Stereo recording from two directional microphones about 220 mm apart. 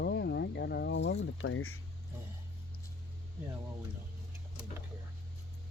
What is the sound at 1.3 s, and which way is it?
Speech, 65° left (ahead or behind).